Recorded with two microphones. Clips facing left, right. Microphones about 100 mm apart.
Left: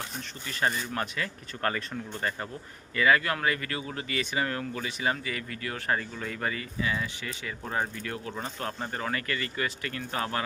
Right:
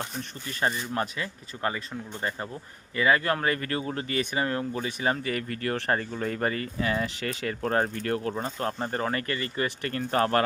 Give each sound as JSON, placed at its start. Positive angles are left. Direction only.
{"t": 0.4, "sound": "speech", "side_deg": -30}
{"t": 5.2, "sound": "speech", "side_deg": -50}
{"t": 8.4, "sound": "speech", "side_deg": -35}